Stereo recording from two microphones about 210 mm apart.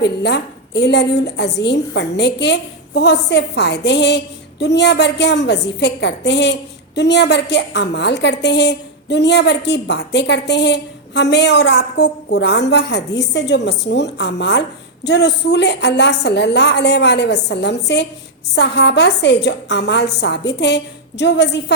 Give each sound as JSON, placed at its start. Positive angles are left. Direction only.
{"t": 0.0, "sound": "a woman's voice", "side_deg": 55}